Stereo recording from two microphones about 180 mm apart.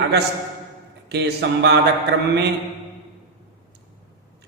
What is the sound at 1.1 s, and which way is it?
Speech, 65° right (ahead or behind).